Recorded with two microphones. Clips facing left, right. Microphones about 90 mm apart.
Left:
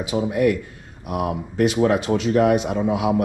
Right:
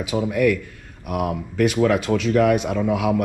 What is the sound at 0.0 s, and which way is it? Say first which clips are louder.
Speech: even; 25° left (ahead or behind).